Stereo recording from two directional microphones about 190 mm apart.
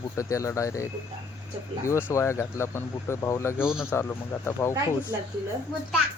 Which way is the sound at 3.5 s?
5° right (ahead or behind).